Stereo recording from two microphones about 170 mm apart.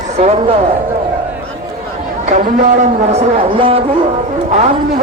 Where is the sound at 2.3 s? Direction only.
50° right (ahead or behind).